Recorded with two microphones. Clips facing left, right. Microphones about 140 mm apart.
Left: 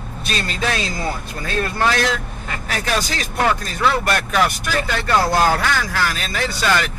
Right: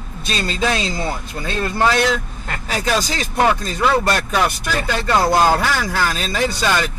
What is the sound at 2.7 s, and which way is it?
A man's voice, 20° right (ahead or behind).